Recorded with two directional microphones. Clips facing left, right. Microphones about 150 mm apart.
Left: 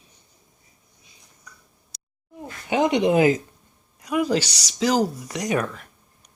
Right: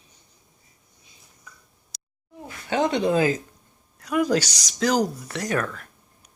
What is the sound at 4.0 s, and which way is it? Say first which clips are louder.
A woman's voice: even; 5° left (ahead or behind).